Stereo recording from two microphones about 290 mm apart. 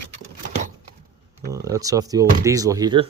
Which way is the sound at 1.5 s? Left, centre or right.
Centre.